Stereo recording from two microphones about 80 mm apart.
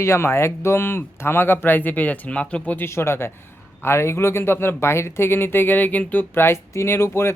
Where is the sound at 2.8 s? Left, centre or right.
Left.